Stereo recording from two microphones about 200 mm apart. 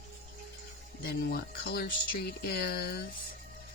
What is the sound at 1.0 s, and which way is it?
Speech, 55° left (ahead or behind).